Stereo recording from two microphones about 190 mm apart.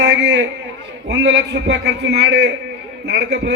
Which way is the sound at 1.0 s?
65° right (ahead or behind).